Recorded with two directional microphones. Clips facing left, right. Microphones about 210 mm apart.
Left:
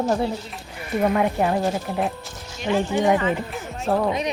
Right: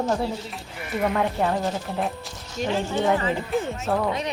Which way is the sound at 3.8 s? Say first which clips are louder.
Left 8 dB; 30° left (ahead or behind).